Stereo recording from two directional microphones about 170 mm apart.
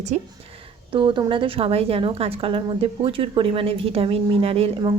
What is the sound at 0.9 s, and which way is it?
A woman's voice, 30° right (ahead or behind).